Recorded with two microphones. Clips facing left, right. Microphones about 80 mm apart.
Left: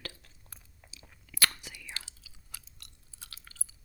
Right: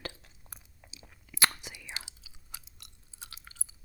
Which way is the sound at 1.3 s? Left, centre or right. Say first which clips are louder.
Right 2 dB; right.